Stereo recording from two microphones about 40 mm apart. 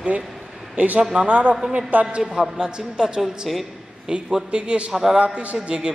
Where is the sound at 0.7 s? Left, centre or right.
Right.